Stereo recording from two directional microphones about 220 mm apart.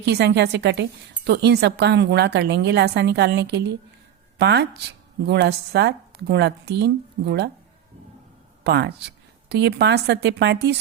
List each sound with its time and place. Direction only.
0.0 s a woman's voice: 50° right (ahead or behind)
8.6 s a woman's voice: 50° right (ahead or behind)